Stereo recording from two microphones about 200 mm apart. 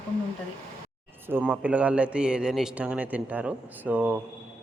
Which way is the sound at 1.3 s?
5° right (ahead or behind).